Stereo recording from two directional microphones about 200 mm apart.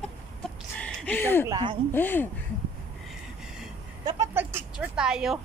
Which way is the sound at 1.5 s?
25° right (ahead or behind).